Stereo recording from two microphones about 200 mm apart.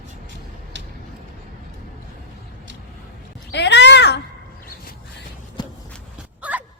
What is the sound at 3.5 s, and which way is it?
Cat, 60° left (ahead or behind).